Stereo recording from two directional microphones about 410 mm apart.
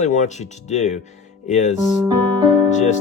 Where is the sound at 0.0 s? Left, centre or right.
Centre.